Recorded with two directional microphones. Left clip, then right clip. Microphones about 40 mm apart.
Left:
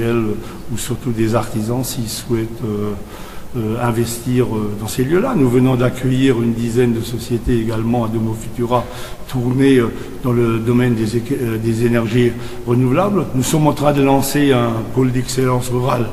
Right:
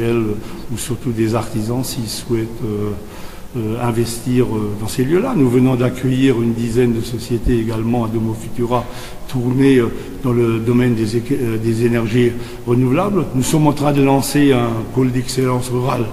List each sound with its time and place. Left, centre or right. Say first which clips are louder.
0.0 s a man's voice: even; centre
2.3 s speech: even; left
3.6 s a man's voice: left 1 dB; centre